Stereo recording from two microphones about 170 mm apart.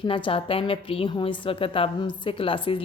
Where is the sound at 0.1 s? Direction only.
30° left (ahead or behind).